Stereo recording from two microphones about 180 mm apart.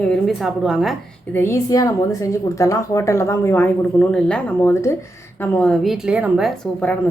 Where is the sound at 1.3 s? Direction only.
15° left (ahead or behind).